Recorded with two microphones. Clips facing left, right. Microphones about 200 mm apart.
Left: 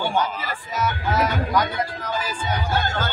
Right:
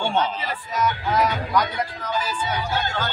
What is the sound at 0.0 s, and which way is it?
Music, 25° right (ahead or behind).